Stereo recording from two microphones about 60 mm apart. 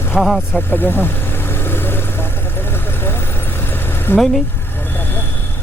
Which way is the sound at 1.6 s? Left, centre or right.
Left.